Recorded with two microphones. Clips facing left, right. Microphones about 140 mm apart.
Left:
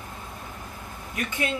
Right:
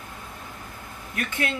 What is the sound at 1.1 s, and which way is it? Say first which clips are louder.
Speech: even; 15° left (ahead or behind).